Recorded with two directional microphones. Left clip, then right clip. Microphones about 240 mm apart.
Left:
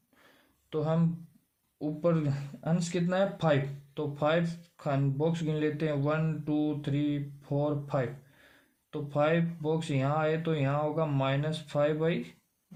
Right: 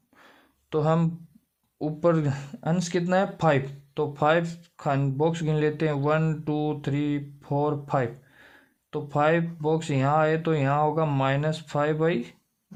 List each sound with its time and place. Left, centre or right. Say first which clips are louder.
0.7 s speech: right 7 dB; right